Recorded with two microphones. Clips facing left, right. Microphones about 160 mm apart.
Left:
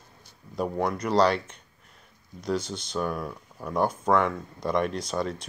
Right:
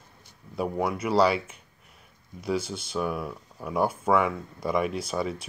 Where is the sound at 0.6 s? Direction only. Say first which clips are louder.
Even; 5° right (ahead or behind).